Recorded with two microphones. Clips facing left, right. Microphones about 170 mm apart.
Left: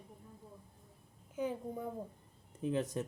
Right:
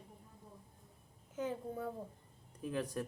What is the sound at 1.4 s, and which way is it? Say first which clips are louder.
A child's voice: left 2 dB; 15° left (ahead or behind).